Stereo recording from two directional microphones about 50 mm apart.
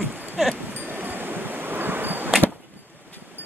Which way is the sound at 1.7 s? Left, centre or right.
Right.